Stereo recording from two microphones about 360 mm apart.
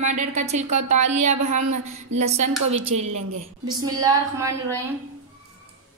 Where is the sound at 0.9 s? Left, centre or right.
Centre.